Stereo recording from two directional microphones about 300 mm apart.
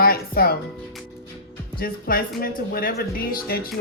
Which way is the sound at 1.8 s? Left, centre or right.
Left.